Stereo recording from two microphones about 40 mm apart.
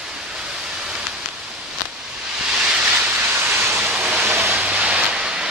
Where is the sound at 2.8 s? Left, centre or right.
Right.